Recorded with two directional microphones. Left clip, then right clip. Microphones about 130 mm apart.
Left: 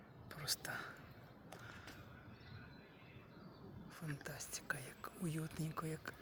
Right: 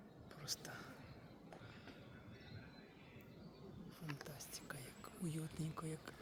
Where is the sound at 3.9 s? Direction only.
50° left (ahead or behind).